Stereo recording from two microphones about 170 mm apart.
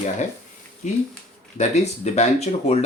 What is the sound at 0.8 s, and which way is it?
Speech, 45° left (ahead or behind).